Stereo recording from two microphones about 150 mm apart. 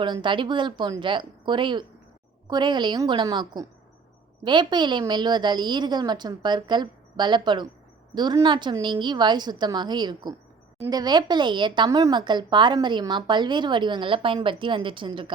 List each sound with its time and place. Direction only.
0.0 s a woman's voice: 30° right (ahead or behind)